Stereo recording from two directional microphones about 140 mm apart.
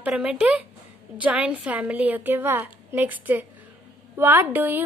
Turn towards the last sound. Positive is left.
turn(degrees=-15)  # may be behind; listen again after turning